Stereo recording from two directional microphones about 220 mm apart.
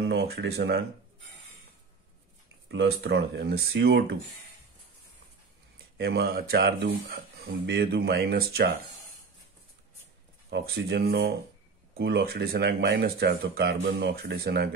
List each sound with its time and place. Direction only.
0.1 s speech: 50° right (ahead or behind)
2.7 s speech: 50° right (ahead or behind)
5.9 s speech: 45° right (ahead or behind)
10.5 s speech: 45° right (ahead or behind)